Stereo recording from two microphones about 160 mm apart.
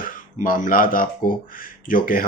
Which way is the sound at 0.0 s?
55° left (ahead or behind).